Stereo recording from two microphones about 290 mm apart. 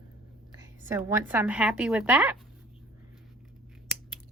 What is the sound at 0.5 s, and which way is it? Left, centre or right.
A woman's voice, centre.